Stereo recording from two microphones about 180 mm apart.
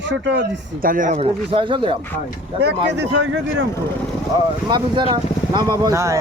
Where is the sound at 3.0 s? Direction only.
70° right (ahead or behind).